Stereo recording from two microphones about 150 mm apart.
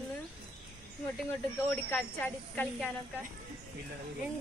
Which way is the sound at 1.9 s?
10° left (ahead or behind).